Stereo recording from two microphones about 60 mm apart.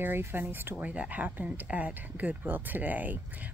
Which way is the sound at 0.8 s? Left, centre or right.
Right.